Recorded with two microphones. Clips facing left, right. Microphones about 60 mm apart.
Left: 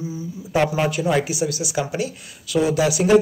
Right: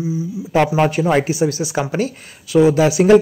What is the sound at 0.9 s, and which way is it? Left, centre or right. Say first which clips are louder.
Speech: right 4 dB; right.